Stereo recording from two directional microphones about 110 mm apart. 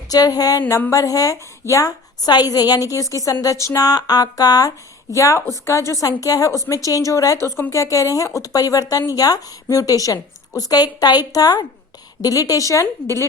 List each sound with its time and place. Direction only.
0.1 s a woman's voice: 35° left (ahead or behind)